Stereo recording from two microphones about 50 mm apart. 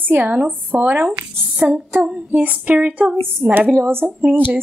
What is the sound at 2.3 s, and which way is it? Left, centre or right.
Speech, right.